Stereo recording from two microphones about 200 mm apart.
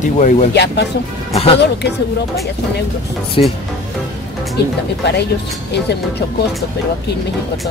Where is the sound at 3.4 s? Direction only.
25° left (ahead or behind).